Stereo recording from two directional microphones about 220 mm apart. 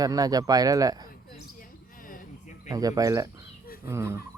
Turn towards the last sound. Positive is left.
turn(degrees=-10)  # may be behind; listen again after turning